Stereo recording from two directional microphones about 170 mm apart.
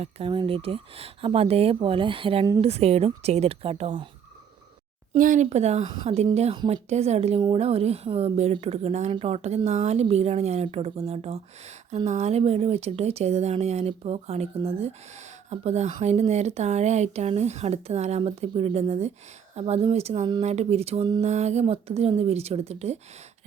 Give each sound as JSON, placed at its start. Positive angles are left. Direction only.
{"t": 0.0, "sound": "speech", "side_deg": -30}
{"t": 5.1, "sound": "speech", "side_deg": -50}